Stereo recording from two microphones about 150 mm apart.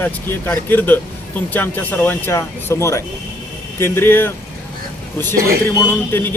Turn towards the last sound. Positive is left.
turn(degrees=15)  # may be behind; listen again after turning